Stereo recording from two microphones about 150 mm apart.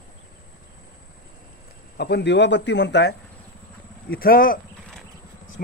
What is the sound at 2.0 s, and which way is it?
Speech, 90° left.